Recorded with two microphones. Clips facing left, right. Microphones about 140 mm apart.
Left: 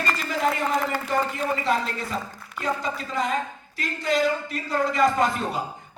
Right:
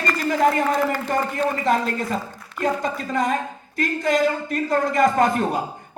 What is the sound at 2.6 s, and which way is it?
A woman's voice, 50° right (ahead or behind).